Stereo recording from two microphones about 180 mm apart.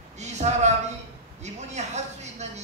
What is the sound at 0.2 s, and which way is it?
A woman's voice, 40° right (ahead or behind).